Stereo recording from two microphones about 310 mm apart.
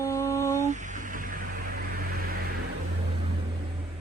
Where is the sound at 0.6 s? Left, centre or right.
Right.